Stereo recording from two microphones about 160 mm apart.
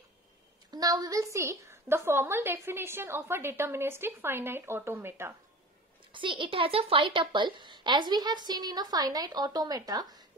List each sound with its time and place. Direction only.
0.7 s a woman's voice: 25° right (ahead or behind)
6.1 s speech: 30° right (ahead or behind)